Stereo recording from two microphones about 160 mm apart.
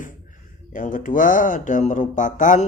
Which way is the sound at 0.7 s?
55° left (ahead or behind).